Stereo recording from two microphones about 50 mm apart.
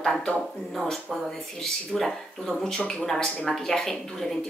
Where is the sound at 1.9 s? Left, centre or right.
Centre.